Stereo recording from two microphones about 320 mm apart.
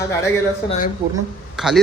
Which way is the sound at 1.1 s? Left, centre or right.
Centre.